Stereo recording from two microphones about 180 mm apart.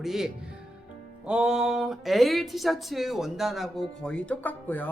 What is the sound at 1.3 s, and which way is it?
Speech, 5° right (ahead or behind).